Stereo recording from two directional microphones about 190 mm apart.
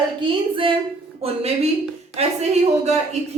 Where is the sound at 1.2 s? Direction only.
30° right (ahead or behind).